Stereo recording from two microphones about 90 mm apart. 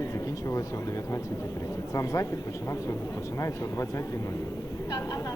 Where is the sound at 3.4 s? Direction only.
35° left (ahead or behind).